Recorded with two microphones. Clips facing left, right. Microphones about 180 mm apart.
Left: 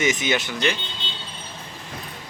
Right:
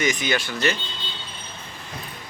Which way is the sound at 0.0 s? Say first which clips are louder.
Left 1 dB; 20° left (ahead or behind).